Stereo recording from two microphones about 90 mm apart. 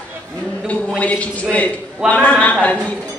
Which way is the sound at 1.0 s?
15° left (ahead or behind).